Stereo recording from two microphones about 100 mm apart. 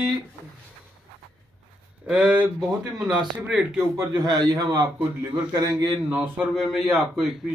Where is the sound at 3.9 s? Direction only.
45° right (ahead or behind).